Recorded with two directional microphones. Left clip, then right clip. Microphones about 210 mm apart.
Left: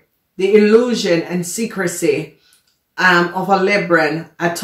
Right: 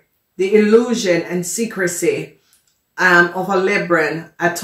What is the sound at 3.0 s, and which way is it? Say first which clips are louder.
Speech: right 1 dB; 35° left (ahead or behind).